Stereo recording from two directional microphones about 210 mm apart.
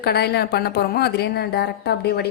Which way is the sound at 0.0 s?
50° left (ahead or behind).